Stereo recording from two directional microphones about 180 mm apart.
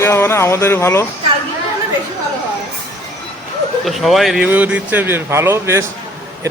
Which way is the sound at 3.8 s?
Centre (ahead or behind).